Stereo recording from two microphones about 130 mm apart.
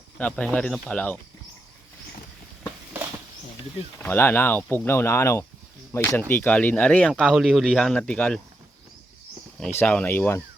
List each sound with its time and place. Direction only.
0.2 s speech: 10° left (ahead or behind)
3.9 s speech: 15° left (ahead or behind)
7.1 s speech: centre (ahead or behind)
9.7 s speech: 10° left (ahead or behind)